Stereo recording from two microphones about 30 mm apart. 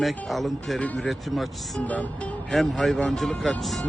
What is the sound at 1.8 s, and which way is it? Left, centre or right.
Speech, left.